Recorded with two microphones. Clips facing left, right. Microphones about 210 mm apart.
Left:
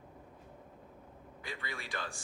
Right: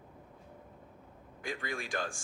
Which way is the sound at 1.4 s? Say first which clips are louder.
Right 6 dB; 45° right (ahead or behind).